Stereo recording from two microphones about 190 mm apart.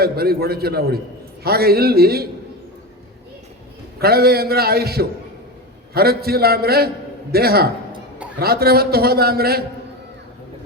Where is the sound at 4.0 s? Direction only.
55° right (ahead or behind).